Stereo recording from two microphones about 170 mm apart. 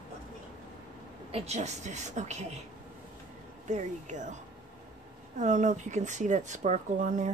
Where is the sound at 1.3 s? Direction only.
40° right (ahead or behind).